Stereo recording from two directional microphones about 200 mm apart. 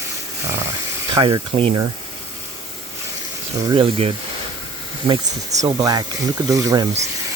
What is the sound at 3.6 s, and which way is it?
Speech, 25° right (ahead or behind).